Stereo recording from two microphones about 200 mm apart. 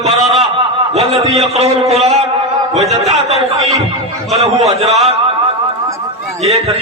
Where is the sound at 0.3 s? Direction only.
30° right (ahead or behind).